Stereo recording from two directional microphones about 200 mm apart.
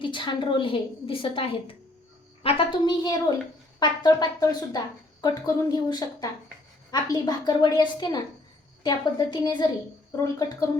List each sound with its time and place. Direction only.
0.0 s a woman's voice: 25° left (ahead or behind)